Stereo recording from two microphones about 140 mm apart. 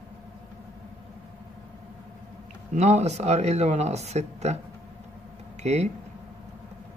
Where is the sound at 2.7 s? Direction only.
55° right (ahead or behind).